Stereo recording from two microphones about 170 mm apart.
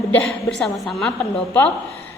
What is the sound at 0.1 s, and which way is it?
A woman's voice, 5° left (ahead or behind).